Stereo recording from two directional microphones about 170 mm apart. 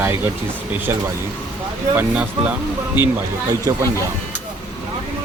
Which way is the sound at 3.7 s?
20° right (ahead or behind).